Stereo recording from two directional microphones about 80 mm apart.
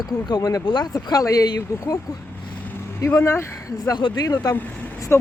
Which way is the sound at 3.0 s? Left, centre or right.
Left.